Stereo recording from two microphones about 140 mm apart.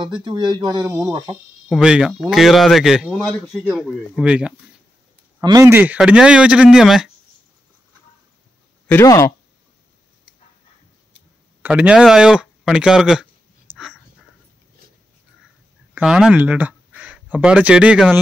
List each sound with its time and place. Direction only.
0.0 s speech: 35° right (ahead or behind)
0.8 s speech: 5° right (ahead or behind); by 3.4 s 10° left (ahead or behind)
3.4 s speech: 5° right (ahead or behind)
5.4 s speech: 30° right (ahead or behind)
5.7 s speech: 15° right (ahead or behind)
9.0 s speech: 25° left (ahead or behind)
11.6 s speech: 10° right (ahead or behind)
16.0 s speech: 5° right (ahead or behind)